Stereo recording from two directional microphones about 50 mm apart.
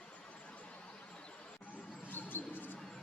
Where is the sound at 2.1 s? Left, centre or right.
Left.